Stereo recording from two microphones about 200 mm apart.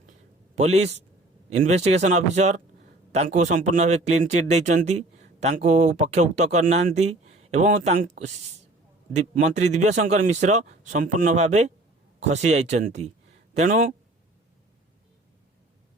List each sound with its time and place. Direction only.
0.5 s a man's voice: 35° right (ahead or behind)